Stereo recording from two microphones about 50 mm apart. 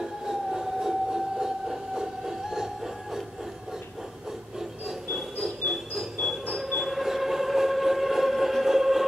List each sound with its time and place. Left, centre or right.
0.0 s train: centre
4.6 s rub: centre
6.5 s train: centre